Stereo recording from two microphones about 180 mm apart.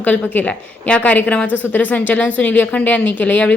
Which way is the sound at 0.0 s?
10° left (ahead or behind).